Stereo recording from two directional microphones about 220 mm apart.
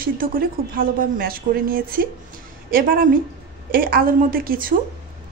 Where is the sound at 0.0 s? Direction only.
40° right (ahead or behind).